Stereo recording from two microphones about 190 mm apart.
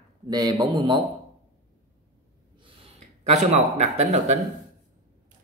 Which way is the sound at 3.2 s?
35° right (ahead or behind).